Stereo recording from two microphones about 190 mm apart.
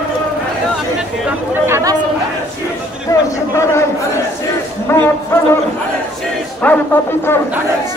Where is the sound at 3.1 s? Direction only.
15° left (ahead or behind).